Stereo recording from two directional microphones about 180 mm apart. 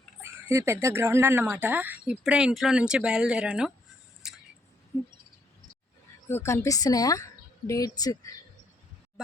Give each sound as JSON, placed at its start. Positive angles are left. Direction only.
{"t": 0.2, "sound": "speech", "side_deg": -15}
{"t": 4.2, "sound": "a sound", "side_deg": -5}
{"t": 6.2, "sound": "a woman's voice", "side_deg": 15}